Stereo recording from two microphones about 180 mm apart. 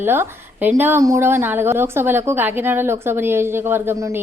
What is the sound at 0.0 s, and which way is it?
A woman's voice, 10° right (ahead or behind).